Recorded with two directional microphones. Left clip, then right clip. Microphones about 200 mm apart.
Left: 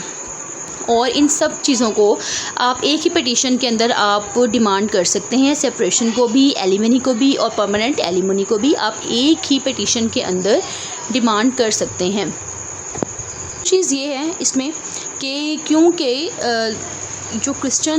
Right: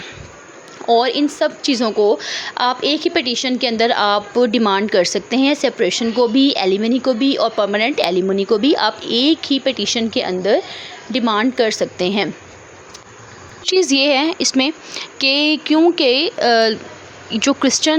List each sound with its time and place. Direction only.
0.9 s a woman's voice: 20° right (ahead or behind)
13.7 s speech: 30° right (ahead or behind)